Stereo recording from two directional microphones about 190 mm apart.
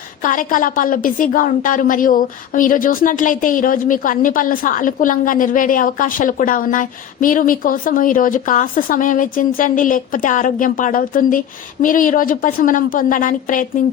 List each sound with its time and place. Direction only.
0.2 s a woman's voice: 45° left (ahead or behind)